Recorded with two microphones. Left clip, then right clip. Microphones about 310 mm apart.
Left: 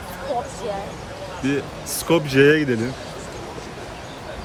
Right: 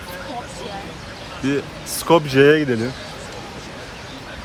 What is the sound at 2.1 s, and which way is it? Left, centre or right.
Speech, centre.